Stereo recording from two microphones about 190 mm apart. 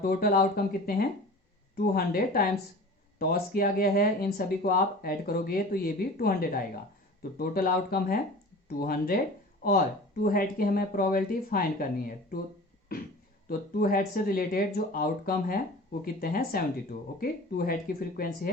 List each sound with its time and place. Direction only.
0.0 s speech: 50° left (ahead or behind)
13.5 s speech: 50° left (ahead or behind)